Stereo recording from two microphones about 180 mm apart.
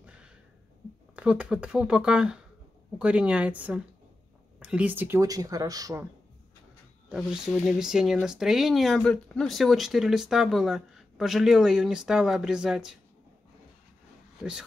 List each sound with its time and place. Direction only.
0.0 s a sound: 5° right (ahead or behind)
1.1 s speech: 5° right (ahead or behind)
7.1 s speech: 5° right (ahead or behind)